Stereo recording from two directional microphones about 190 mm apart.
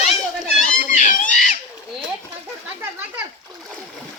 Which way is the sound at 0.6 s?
40° left (ahead or behind).